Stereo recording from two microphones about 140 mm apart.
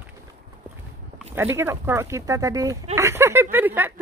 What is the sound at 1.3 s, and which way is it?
Speech, 15° right (ahead or behind).